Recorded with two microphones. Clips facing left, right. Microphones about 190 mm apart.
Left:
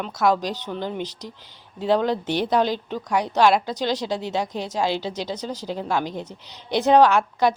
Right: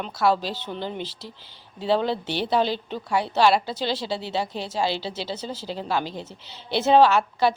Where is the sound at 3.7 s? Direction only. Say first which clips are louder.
Left 3 dB; 15° left (ahead or behind).